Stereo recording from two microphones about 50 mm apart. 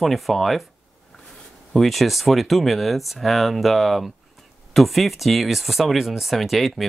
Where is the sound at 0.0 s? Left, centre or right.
Centre.